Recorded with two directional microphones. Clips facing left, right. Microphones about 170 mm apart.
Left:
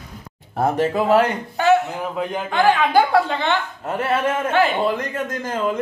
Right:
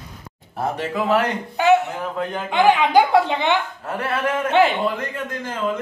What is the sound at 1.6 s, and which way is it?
A man's voice, 15° right (ahead or behind).